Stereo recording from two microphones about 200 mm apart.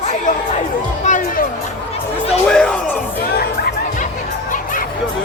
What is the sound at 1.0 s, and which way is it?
Music, 40° left (ahead or behind).